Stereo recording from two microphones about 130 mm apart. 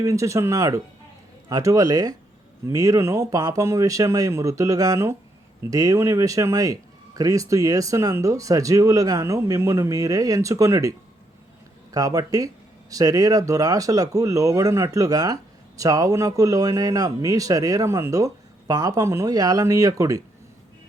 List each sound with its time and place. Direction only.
0.0 s speech: 25° right (ahead or behind)